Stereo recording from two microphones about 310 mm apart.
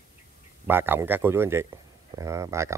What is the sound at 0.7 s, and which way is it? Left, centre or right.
A man's voice, centre.